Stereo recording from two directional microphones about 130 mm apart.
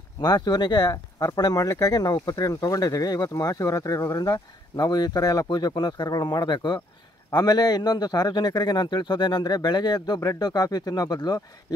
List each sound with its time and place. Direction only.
0.2 s a man's voice: 35° left (ahead or behind)